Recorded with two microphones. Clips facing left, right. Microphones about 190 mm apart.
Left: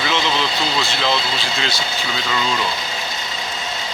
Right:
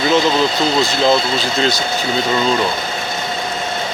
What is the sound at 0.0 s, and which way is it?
Speech, 45° right (ahead or behind).